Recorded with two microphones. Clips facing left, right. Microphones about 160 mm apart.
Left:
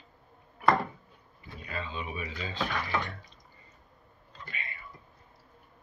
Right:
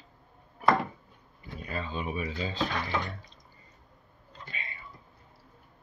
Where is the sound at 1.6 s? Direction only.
40° right (ahead or behind).